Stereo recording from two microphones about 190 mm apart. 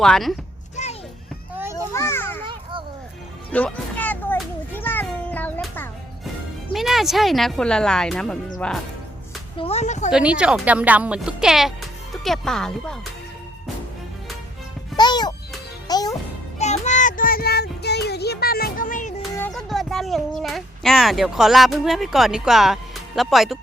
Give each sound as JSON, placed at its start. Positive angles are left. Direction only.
{"t": 0.0, "sound": "speech", "side_deg": 0}
{"t": 0.8, "sound": "children playing", "side_deg": 35}
{"t": 1.9, "sound": "children playing", "side_deg": 15}
{"t": 3.5, "sound": "children playing", "side_deg": 10}
{"t": 6.7, "sound": "speech", "side_deg": 0}
{"t": 9.6, "sound": "speech", "side_deg": 35}
{"t": 10.1, "sound": "speech", "side_deg": -5}
{"t": 14.9, "sound": "music", "side_deg": 20}
{"t": 16.6, "sound": "child singing", "side_deg": 35}
{"t": 19.5, "sound": "a child's voice", "side_deg": 0}